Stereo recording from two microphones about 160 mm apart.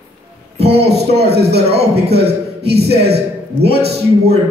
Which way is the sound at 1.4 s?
90° right.